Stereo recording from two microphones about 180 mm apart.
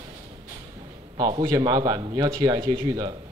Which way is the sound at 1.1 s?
25° right (ahead or behind).